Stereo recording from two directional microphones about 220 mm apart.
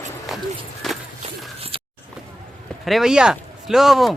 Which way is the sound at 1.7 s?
25° right (ahead or behind).